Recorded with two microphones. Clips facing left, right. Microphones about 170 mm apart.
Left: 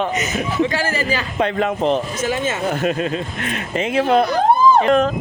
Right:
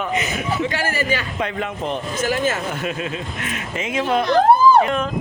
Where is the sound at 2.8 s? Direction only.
40° left (ahead or behind).